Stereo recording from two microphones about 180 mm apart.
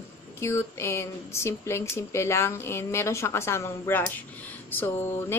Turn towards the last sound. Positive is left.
turn(degrees=15)  # may be behind; listen again after turning